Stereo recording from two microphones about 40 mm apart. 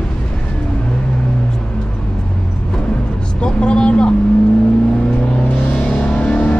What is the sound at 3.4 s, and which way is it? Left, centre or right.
Vehicle, left.